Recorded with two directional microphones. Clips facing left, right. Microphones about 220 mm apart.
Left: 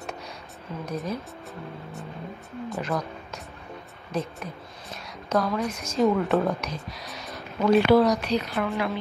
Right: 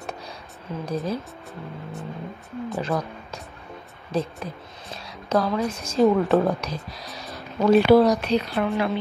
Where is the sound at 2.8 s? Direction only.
30° right (ahead or behind).